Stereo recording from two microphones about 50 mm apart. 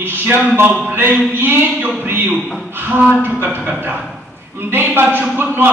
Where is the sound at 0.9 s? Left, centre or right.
Right.